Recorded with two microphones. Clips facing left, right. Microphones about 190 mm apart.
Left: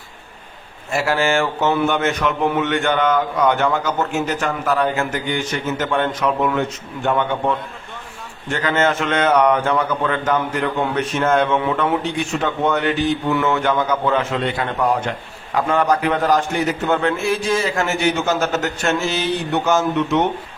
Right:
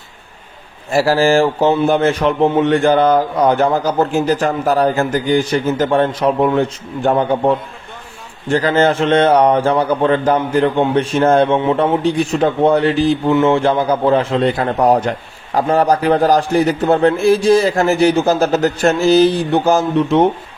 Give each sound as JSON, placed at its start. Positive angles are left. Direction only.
{"t": 0.9, "sound": "speech", "side_deg": -35}